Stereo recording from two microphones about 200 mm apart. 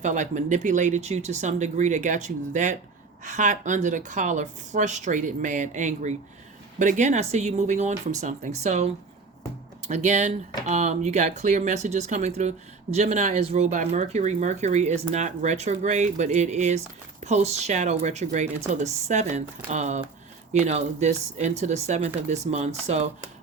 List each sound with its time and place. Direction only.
0.0 s speech: 40° right (ahead or behind)